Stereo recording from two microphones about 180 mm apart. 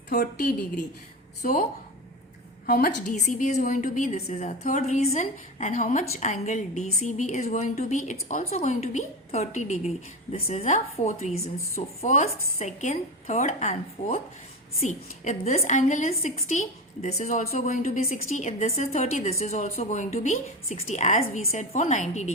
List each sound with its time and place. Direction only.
0.1 s a woman's voice: 50° left (ahead or behind)
2.6 s a woman's voice: 55° left (ahead or behind)